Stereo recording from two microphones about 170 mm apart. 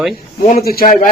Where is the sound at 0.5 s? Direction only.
65° left (ahead or behind).